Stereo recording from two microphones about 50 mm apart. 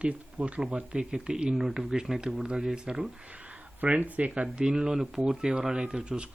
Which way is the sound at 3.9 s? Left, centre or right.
Right.